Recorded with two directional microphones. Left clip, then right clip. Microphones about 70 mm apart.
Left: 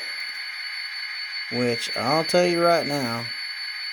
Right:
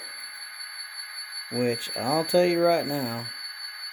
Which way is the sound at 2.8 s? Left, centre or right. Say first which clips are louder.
Left 3 dB; left.